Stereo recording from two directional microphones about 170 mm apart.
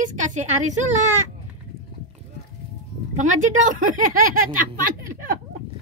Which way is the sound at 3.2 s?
45° right (ahead or behind).